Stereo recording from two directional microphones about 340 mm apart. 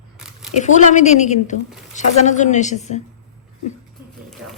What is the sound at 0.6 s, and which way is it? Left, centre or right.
A woman's voice, left.